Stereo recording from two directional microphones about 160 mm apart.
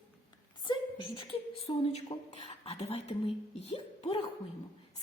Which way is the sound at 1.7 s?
30° left (ahead or behind).